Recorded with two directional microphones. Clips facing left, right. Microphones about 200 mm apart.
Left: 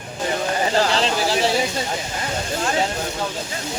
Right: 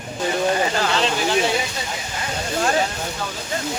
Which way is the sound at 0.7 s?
30° left (ahead or behind).